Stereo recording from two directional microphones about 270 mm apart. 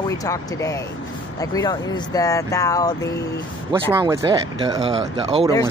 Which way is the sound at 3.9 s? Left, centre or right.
Centre.